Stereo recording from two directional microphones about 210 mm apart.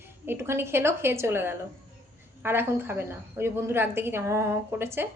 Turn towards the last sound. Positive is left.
turn(degrees=-10)  # may be behind; listen again after turning